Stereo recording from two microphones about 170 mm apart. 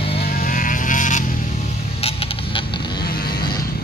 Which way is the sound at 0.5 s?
50° left (ahead or behind).